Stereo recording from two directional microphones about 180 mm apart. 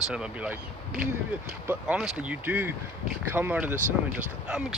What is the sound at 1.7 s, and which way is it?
Speech, 5° right (ahead or behind).